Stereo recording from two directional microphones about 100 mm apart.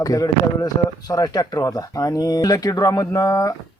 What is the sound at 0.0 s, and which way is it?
A man's voice, 35° left (ahead or behind).